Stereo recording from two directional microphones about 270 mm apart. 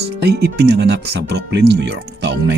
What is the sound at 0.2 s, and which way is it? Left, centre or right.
Speech, right.